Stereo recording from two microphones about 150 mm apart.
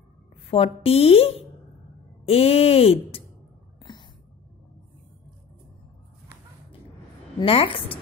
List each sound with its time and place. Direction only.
0.5 s speech: 40° left (ahead or behind)
7.3 s speech: 35° left (ahead or behind)